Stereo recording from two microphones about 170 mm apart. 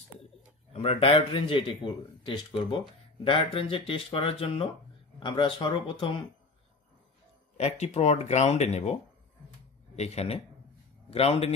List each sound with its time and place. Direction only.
0.7 s speech: 35° left (ahead or behind)
7.5 s speech: 40° left (ahead or behind)
9.9 s a man's voice: 40° left (ahead or behind)